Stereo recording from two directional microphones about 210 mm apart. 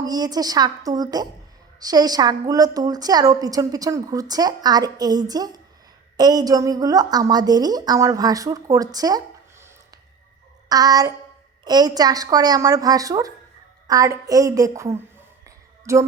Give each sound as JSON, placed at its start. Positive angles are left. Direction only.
{"t": 0.0, "sound": "a woman's voice", "side_deg": -20}
{"t": 10.7, "sound": "a woman's voice", "side_deg": -20}
{"t": 15.4, "sound": "a sound", "side_deg": -15}